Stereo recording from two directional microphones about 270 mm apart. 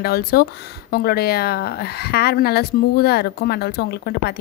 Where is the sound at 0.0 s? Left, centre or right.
Left.